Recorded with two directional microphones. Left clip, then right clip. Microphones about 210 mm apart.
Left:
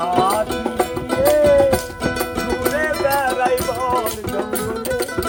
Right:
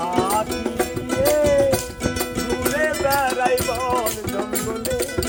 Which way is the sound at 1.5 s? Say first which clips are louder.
Left 4 dB; 15° left (ahead or behind).